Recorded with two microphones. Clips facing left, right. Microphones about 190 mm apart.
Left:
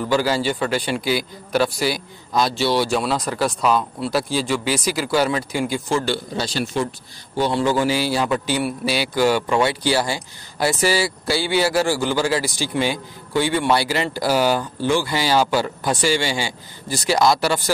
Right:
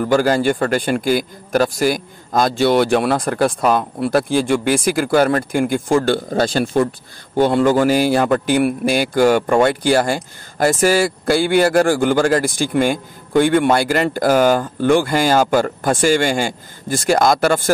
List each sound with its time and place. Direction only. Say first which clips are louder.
0.0 s a man's voice: right 5 dB; 50° right (ahead or behind)